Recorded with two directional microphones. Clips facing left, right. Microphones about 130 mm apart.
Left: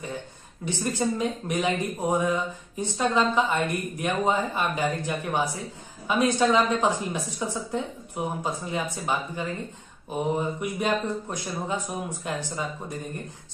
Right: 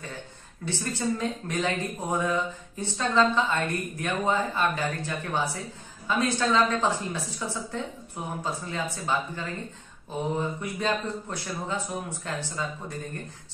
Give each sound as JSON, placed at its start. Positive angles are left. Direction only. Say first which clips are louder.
{"t": 0.7, "sound": "speech", "louder": "left 2 dB", "side_deg": 15}